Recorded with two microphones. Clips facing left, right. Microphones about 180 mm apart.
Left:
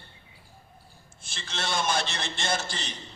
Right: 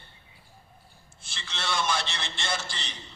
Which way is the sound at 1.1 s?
45° left (ahead or behind).